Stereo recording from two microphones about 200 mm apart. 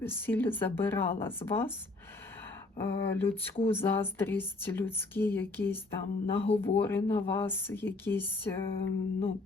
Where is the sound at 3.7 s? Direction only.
10° left (ahead or behind).